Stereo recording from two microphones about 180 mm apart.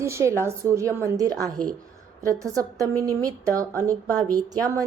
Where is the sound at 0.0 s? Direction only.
15° right (ahead or behind).